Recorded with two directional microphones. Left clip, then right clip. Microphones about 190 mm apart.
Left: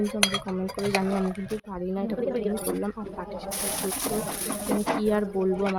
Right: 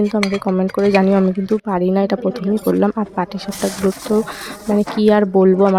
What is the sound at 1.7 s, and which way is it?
Speech, 45° right (ahead or behind).